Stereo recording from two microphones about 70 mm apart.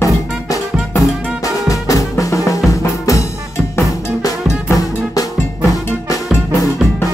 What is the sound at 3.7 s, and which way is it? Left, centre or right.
Drum kit, left.